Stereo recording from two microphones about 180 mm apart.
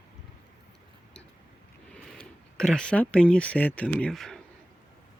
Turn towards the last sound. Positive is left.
turn(degrees=0)  # may be behind; listen again after turning